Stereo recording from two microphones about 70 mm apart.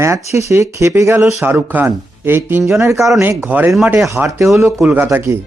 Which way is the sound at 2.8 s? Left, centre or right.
Right.